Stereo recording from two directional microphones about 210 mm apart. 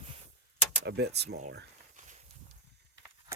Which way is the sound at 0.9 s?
50° right (ahead or behind).